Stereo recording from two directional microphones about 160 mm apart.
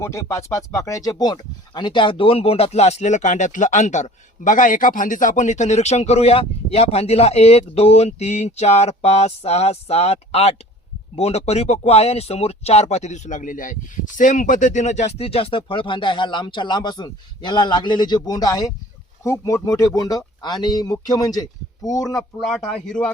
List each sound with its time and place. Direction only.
0.0 s speech: 20° left (ahead or behind)
22.1 s speech: 5° left (ahead or behind)